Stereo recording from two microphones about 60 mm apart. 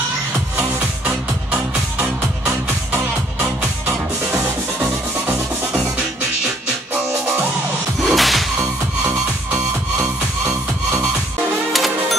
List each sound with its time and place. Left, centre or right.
0.6 s music: right
8.0 s music: centre
11.7 s music: centre